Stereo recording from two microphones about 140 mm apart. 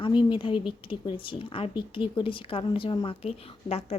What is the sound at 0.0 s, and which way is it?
A woman's voice, 35° left (ahead or behind).